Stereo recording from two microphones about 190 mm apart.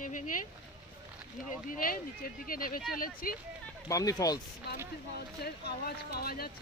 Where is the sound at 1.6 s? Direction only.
50° left (ahead or behind).